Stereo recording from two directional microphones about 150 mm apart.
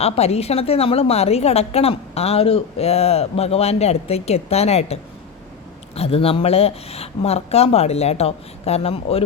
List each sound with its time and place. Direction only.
0.0 s a woman's voice: 45° left (ahead or behind)